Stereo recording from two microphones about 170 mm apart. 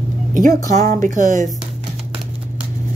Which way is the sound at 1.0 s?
50° right (ahead or behind).